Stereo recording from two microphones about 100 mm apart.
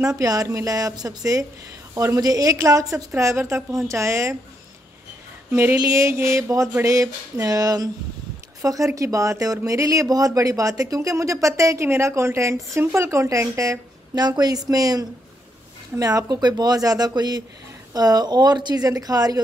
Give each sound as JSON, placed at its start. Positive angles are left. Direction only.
{"t": 0.0, "sound": "speech", "side_deg": -35}
{"t": 5.5, "sound": "a sound", "side_deg": -25}
{"t": 6.7, "sound": "speech", "side_deg": -30}